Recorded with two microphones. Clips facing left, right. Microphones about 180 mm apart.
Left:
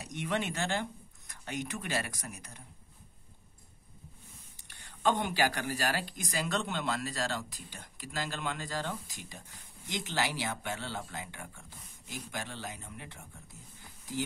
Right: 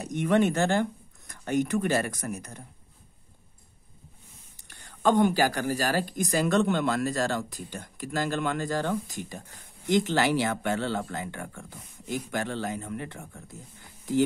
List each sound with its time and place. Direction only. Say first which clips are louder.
0.0 s speech: right 11 dB; 50° right (ahead or behind)
4.6 s speech: right 6 dB; 45° right (ahead or behind)